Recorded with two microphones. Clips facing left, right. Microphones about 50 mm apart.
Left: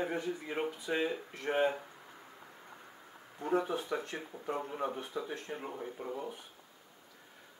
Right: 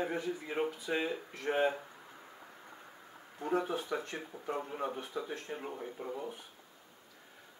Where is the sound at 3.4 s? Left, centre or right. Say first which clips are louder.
Left 1 dB; centre.